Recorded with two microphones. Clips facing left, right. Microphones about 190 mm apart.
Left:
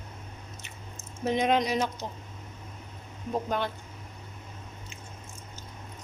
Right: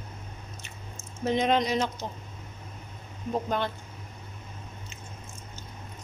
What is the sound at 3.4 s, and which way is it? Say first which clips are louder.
Speech: right 1 dB; 10° left (ahead or behind).